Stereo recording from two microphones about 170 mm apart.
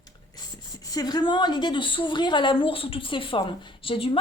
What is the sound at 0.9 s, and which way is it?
A woman's voice, 25° left (ahead or behind).